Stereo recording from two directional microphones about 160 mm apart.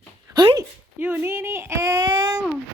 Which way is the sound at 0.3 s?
25° right (ahead or behind).